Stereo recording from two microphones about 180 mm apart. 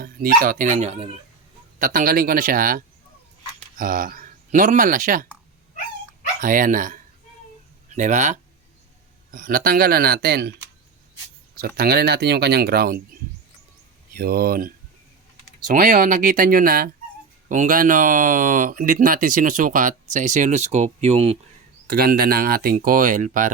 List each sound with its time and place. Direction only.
0.0 s speech: 55° right (ahead or behind); by 1.1 s 35° right (ahead or behind)
1.8 s speech: 50° right (ahead or behind)
6.4 s speech: 50° right (ahead or behind)
11.5 s speech: 55° right (ahead or behind)
14.1 s speech: 55° right (ahead or behind); by 21.3 s 35° right (ahead or behind)
21.8 s speech: 55° right (ahead or behind)